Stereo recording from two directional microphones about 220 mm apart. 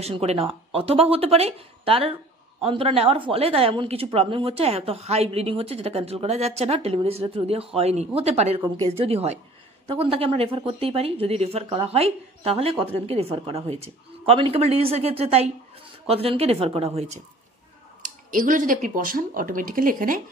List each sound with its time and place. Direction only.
0.0 s speech: 30° right (ahead or behind)
18.0 s speech: 40° right (ahead or behind)